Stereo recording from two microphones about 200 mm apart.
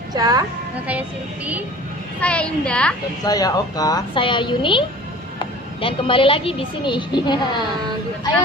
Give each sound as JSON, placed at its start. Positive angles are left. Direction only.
{"t": 0.1, "sound": "a woman's voice", "side_deg": -20}
{"t": 2.2, "sound": "a child's voice", "side_deg": 5}
{"t": 3.2, "sound": "speech", "side_deg": 20}